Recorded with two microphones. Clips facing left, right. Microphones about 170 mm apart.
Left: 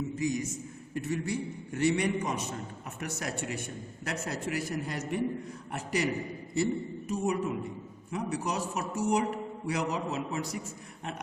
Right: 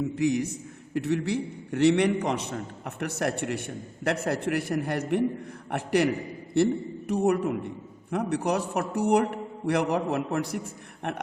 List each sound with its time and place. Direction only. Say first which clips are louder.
0.2 s a man's voice: right 7 dB; 65° right (ahead or behind)
7.1 s a man's voice: right 6 dB; 65° right (ahead or behind)